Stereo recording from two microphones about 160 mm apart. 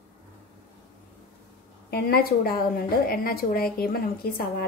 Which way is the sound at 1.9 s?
75° left (ahead or behind).